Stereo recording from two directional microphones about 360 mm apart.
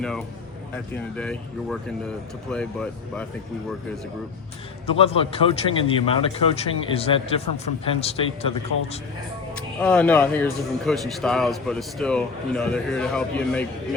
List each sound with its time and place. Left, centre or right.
0.9 s a man's voice: centre
4.9 s speech: centre
9.8 s a man's voice: centre